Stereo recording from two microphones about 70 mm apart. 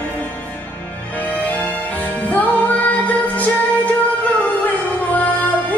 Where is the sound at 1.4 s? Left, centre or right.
Left.